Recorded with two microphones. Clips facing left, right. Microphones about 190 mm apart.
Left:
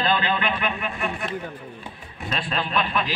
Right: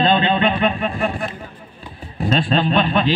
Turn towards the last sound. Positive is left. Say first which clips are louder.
# right 8 dB
turn(degrees=-30)  # may be behind; listen again after turning